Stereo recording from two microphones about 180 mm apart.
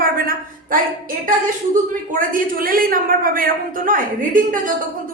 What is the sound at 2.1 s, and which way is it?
Speech, 50° right (ahead or behind).